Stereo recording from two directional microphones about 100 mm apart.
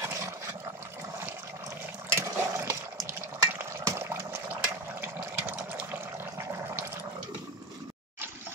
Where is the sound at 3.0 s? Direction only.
25° right (ahead or behind).